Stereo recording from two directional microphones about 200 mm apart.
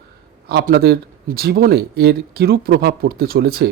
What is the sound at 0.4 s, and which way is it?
Speech, 50° right (ahead or behind).